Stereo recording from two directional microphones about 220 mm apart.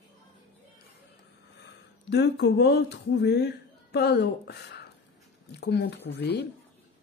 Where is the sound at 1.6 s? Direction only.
50° left (ahead or behind).